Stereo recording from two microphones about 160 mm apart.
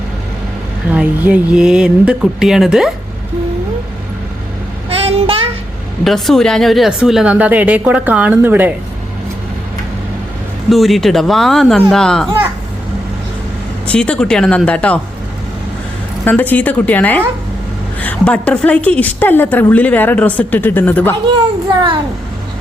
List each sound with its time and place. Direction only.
0.9 s speech: 10° right (ahead or behind)
4.9 s child singing: 35° right (ahead or behind)
6.1 s speech: centre (ahead or behind)
10.7 s speech: centre (ahead or behind)
13.8 s a woman's voice: 5° left (ahead or behind)
16.2 s a woman's voice: 10° left (ahead or behind)